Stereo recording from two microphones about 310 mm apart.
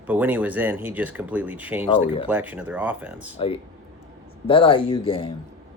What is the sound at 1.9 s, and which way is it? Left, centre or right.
Speech, centre.